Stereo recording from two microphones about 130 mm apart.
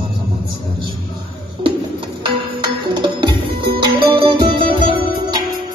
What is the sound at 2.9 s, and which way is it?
Music, 35° right (ahead or behind).